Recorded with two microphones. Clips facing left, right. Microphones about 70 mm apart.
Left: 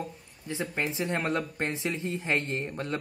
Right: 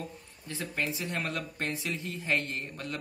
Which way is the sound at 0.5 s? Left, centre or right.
Left.